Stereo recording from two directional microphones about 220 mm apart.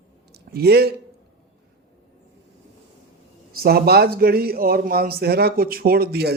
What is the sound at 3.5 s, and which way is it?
A man's voice, 45° right (ahead or behind).